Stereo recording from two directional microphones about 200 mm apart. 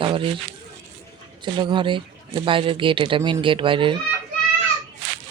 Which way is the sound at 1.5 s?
25° right (ahead or behind).